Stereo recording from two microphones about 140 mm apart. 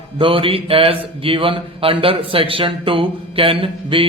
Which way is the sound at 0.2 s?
40° right (ahead or behind).